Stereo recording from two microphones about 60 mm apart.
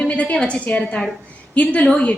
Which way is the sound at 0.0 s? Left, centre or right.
Left.